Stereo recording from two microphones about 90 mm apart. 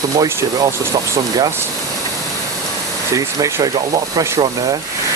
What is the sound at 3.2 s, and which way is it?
Speech, 40° right (ahead or behind).